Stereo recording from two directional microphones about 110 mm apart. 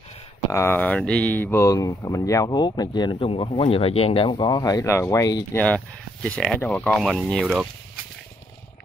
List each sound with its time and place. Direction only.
0.5 s speech: 20° left (ahead or behind)
6.2 s speech: 10° left (ahead or behind)